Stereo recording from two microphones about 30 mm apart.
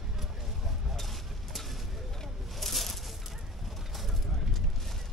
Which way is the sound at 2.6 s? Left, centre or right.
Centre.